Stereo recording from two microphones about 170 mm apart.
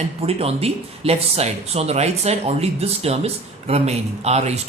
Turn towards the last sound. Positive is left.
turn(degrees=-40)  # may be behind; listen again after turning